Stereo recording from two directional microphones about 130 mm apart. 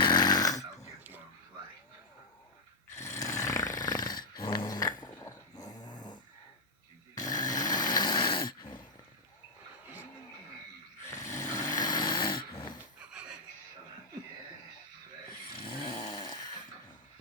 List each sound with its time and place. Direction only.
0.0 s snoring: 35° left (ahead or behind)
3.0 s snoring: 25° left (ahead or behind)
5.2 s dog: 30° left (ahead or behind)
7.2 s snoring: 30° left (ahead or behind)
11.1 s a sound: 25° left (ahead or behind)
15.6 s snoring: 40° left (ahead or behind)